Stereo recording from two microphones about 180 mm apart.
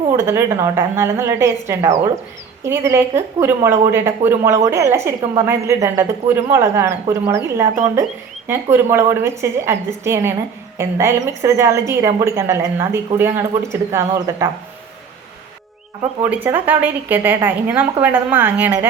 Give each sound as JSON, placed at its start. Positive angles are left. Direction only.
{"t": 0.2, "sound": "a woman's voice", "side_deg": -15}
{"t": 16.2, "sound": "a woman's voice", "side_deg": -10}